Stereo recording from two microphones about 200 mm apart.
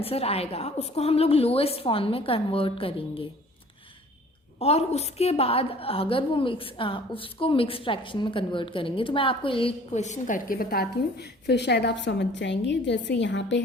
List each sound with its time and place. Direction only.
0.0 s a woman's voice: 30° left (ahead or behind)
4.6 s a woman's voice: 30° left (ahead or behind); by 13.6 s 65° left (ahead or behind)